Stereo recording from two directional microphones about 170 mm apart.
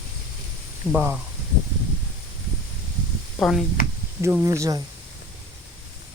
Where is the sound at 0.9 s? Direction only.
15° right (ahead or behind).